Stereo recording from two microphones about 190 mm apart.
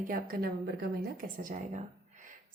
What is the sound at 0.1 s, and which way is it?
Speech, 50° right (ahead or behind).